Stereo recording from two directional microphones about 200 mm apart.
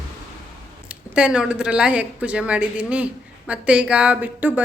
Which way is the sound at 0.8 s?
5° right (ahead or behind).